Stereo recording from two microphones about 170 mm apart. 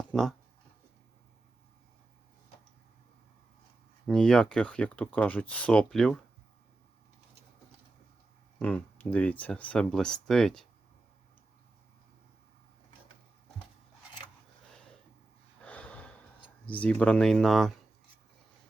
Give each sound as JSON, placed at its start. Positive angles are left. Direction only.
{"t": 0.0, "sound": "speech", "side_deg": 5}
{"t": 4.0, "sound": "speech", "side_deg": 5}
{"t": 8.5, "sound": "speech", "side_deg": 10}
{"t": 15.6, "sound": "gasp", "side_deg": 10}
{"t": 16.6, "sound": "speech", "side_deg": 10}